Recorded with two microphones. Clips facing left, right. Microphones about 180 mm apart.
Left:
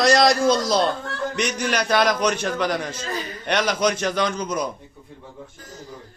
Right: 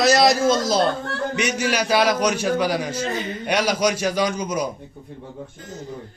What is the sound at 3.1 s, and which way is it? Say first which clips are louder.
Speech: right 3 dB; 25° right (ahead or behind).